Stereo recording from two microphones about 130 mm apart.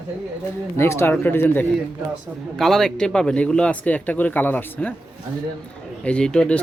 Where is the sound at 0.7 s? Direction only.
20° left (ahead or behind).